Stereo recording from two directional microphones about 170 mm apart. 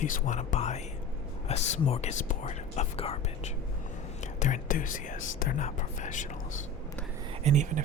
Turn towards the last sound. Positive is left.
turn(degrees=-45)  # may be behind; listen again after turning